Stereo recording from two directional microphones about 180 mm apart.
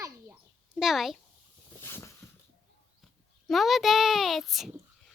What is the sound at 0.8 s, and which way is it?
Speech, centre (ahead or behind).